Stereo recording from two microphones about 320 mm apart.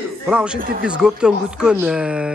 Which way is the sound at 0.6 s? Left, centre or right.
Right.